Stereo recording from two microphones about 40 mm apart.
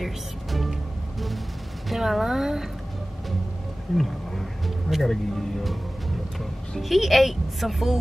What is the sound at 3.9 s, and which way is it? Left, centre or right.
A woman's voice, centre.